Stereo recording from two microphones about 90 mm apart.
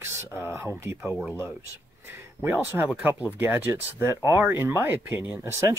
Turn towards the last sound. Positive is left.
turn(degrees=-30)  # may be behind; listen again after turning